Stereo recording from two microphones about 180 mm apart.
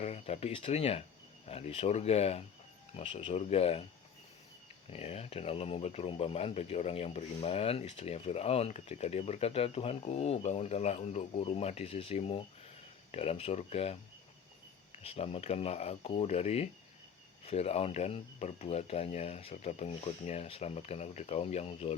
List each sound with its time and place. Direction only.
0.0 s speech: 35° left (ahead or behind)
4.9 s speech: 35° left (ahead or behind)
14.9 s speech: 35° left (ahead or behind)